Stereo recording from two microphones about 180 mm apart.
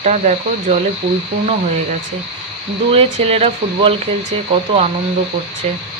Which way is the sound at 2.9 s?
30° right (ahead or behind).